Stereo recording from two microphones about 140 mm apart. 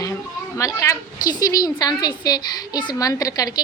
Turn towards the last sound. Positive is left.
turn(degrees=25)  # may be behind; listen again after turning